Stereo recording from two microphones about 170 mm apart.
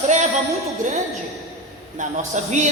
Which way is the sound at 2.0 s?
50° right (ahead or behind).